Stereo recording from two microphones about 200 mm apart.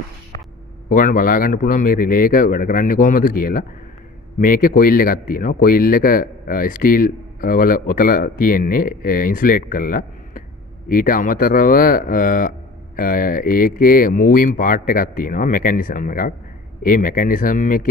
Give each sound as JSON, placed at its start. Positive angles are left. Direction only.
{"t": 0.8, "sound": "speech", "side_deg": 45}